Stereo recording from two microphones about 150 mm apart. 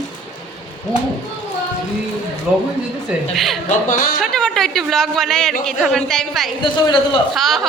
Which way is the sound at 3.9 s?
65° left (ahead or behind).